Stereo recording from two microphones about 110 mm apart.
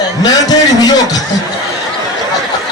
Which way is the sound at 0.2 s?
35° left (ahead or behind).